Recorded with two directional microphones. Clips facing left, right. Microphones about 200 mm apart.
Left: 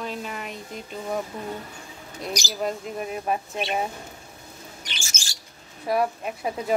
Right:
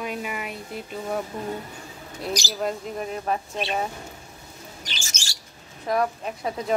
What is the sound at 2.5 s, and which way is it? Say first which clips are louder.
Speech: even; centre (ahead or behind).